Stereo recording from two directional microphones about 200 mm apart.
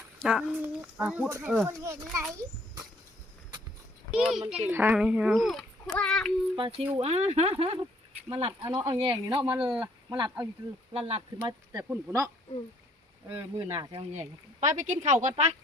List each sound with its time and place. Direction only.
0.2 s speech: 5° right (ahead or behind)
4.1 s a child's voice: centre (ahead or behind)
6.6 s speech: 30° right (ahead or behind)
13.3 s speech: 15° right (ahead or behind)
14.6 s a woman's voice: 40° right (ahead or behind)